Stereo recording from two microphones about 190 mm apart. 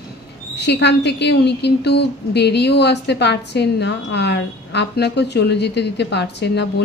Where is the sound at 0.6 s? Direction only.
60° left (ahead or behind).